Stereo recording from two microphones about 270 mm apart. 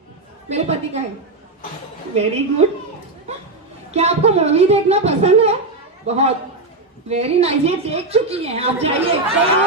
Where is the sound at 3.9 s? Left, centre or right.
Right.